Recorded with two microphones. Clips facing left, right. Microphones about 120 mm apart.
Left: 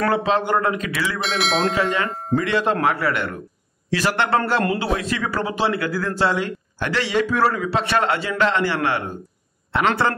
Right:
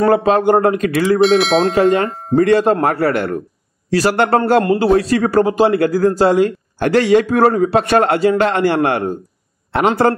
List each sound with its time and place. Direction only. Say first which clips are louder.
0.1 s speech: right 7 dB; 50° right (ahead or behind)
1.2 s speech: right 8 dB; centre (ahead or behind)
1.8 s speech: right 9 dB; 50° right (ahead or behind)